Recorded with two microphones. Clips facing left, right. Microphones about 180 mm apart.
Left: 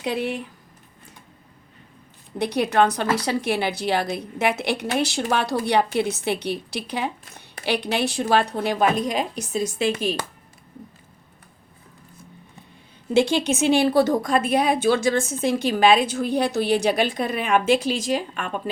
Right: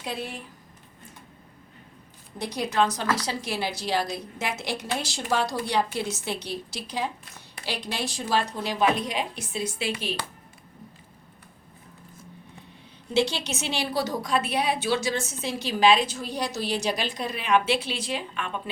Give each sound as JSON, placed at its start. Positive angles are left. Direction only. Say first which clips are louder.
{"t": 0.0, "sound": "speech", "louder": "left 8 dB", "side_deg": 65}
{"t": 2.4, "sound": "a woman's voice", "louder": "left 6 dB", "side_deg": 60}
{"t": 13.1, "sound": "a woman's voice", "louder": "left 6 dB", "side_deg": 50}